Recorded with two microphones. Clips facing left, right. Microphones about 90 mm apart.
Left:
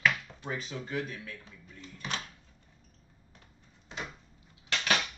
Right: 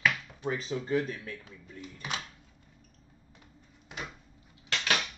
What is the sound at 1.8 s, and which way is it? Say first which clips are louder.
Speech: even; 15° right (ahead or behind).